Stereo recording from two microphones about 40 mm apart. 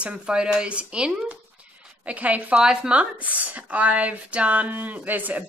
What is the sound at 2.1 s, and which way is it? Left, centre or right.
Speech, right.